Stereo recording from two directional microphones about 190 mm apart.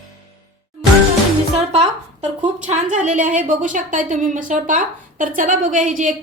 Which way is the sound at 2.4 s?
40° right (ahead or behind).